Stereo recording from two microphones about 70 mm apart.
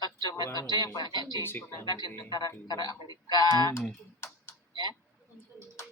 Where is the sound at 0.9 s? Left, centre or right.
Left.